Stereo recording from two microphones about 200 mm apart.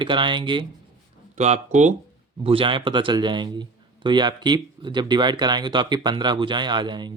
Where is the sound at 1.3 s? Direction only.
35° right (ahead or behind).